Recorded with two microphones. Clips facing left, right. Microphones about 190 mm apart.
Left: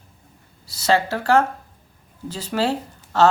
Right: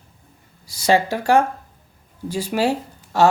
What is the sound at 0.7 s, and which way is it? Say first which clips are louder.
Speech: right 2 dB; 15° right (ahead or behind).